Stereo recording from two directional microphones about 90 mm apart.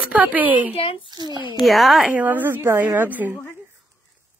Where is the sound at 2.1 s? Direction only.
20° right (ahead or behind).